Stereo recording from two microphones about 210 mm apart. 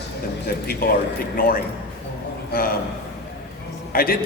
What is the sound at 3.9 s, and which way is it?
Speech, 45° left (ahead or behind).